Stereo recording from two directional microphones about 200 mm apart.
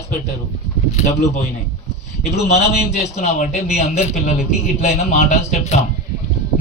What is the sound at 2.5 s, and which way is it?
A man's voice, 35° left (ahead or behind).